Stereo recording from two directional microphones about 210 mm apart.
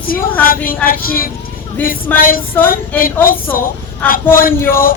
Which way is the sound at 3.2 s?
45° left (ahead or behind).